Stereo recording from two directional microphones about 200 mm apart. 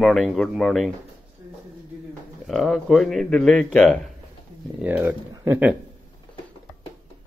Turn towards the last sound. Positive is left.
turn(degrees=-10)  # may be behind; listen again after turning